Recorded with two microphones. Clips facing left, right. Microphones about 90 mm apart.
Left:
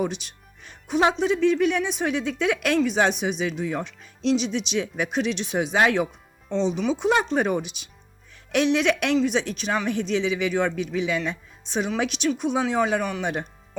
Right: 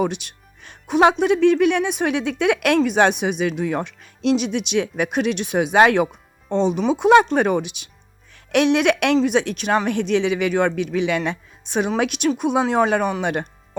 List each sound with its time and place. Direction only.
0.0 s speech: 65° right (ahead or behind)
8.5 s speech: 65° right (ahead or behind)